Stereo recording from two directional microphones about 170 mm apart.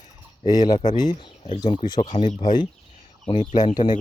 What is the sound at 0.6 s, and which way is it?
Speech, 25° left (ahead or behind).